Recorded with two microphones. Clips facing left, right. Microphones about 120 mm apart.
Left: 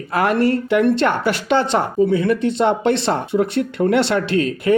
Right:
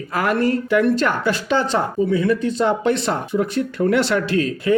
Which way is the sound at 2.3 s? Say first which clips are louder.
Left 2 dB; 65° left (ahead or behind).